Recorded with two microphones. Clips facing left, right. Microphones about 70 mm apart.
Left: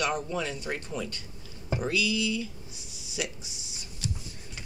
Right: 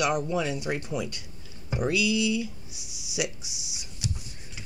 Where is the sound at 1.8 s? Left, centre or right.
Centre.